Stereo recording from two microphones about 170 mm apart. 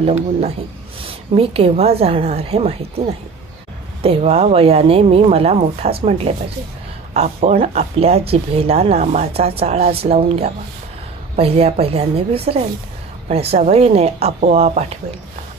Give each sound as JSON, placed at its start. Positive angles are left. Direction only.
{"t": 0.0, "sound": "a woman's voice", "side_deg": -40}